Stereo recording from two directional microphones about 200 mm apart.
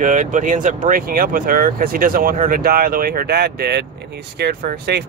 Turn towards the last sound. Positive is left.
turn(degrees=-50)  # may be behind; listen again after turning